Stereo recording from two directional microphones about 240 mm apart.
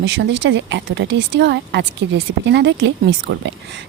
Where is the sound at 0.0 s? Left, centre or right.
Right.